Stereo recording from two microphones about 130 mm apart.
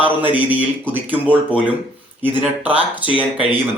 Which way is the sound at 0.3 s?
10° right (ahead or behind).